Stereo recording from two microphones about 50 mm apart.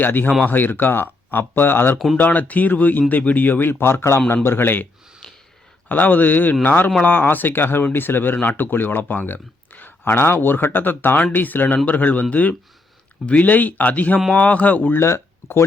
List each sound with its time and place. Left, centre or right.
0.0 s a man's voice: left
2.1 s a man's voice: left
4.4 s speech: left
5.2 s a sound: centre
5.9 s a man's voice: left
14.9 s speech: left